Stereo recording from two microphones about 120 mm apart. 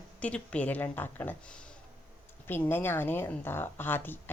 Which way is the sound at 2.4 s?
15° left (ahead or behind).